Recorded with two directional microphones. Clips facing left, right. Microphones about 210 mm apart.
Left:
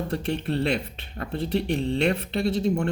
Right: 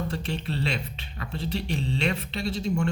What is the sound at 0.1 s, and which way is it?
Speech, 55° left (ahead or behind).